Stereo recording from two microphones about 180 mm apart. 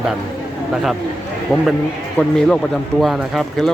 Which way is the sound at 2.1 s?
5° left (ahead or behind).